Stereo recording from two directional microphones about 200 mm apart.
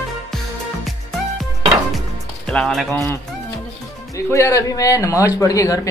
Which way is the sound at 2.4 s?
5° left (ahead or behind).